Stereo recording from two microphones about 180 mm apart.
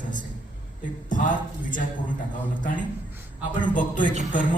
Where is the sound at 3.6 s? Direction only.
45° left (ahead or behind).